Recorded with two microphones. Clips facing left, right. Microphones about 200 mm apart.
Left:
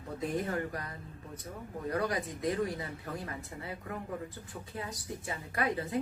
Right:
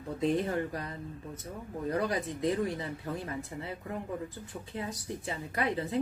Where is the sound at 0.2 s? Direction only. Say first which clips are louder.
Right 4 dB; 25° right (ahead or behind).